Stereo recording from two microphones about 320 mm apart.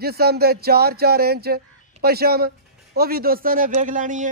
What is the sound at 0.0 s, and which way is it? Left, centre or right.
Speech, right.